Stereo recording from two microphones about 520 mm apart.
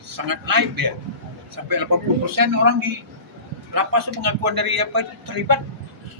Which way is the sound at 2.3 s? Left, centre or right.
Right.